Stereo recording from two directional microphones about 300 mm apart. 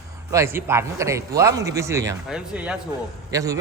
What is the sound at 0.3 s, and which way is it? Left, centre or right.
A man's voice, centre.